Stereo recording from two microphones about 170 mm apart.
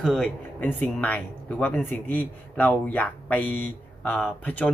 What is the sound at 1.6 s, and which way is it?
Speech, 10° left (ahead or behind).